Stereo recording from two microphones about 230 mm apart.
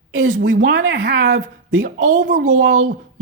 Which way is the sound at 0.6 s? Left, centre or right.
Right.